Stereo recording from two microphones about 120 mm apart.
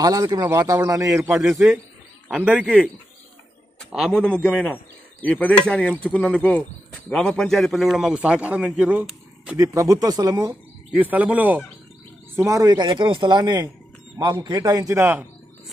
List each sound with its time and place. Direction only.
0.0 s a man's voice: 30° right (ahead or behind)
1.2 s a man's voice: 15° right (ahead or behind)
3.9 s a man's voice: 5° right (ahead or behind)
4.2 s a man's voice: 10° left (ahead or behind); by 9.6 s 10° right (ahead or behind)
9.6 s speech: 30° right (ahead or behind)
10.5 s speech: 15° right (ahead or behind)
12.4 s a man's voice: 25° right (ahead or behind)